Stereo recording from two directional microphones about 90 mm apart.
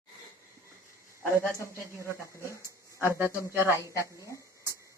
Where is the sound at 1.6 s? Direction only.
30° left (ahead or behind).